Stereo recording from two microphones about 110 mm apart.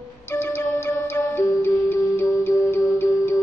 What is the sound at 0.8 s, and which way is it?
Music, 20° left (ahead or behind).